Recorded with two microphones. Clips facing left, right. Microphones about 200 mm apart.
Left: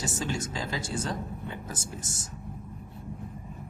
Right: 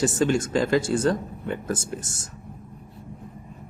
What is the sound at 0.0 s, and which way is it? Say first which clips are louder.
Speech: right 10 dB; 55° right (ahead or behind).